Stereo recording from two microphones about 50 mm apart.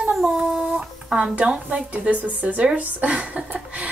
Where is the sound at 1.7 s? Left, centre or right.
Right.